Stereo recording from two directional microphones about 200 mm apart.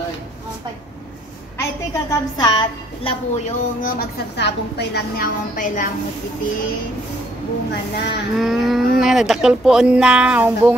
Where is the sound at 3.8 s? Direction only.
45° left (ahead or behind).